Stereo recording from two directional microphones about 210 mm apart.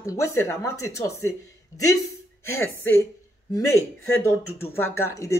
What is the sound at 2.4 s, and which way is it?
A woman's voice, 10° left (ahead or behind).